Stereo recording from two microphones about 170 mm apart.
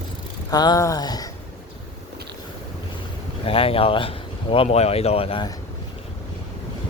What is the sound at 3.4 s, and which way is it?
Speech, 35° left (ahead or behind).